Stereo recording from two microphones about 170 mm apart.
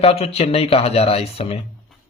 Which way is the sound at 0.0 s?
35° left (ahead or behind).